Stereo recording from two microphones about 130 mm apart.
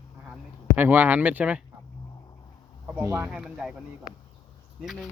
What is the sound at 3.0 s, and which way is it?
Speech, 20° right (ahead or behind).